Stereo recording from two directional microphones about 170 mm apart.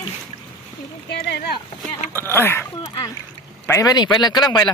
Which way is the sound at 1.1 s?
75° left (ahead or behind).